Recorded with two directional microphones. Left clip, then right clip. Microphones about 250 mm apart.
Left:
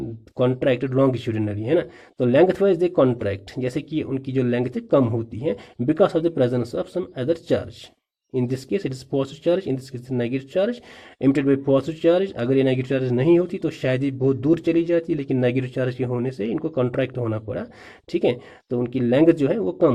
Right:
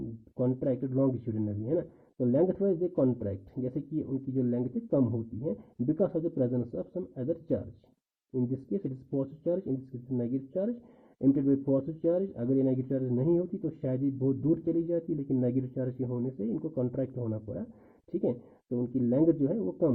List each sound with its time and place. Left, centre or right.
0.4 s speech: centre
4.9 s speech: left
5.4 s speech: centre
8.4 s speech: centre